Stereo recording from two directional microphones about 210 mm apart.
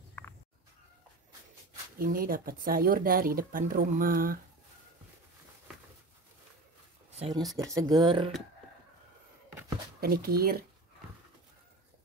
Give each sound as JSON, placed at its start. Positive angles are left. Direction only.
{"t": 2.0, "sound": "speech", "side_deg": -45}
{"t": 7.1, "sound": "a sound", "side_deg": -30}
{"t": 7.5, "sound": "speech", "side_deg": -15}
{"t": 9.9, "sound": "speech", "side_deg": -45}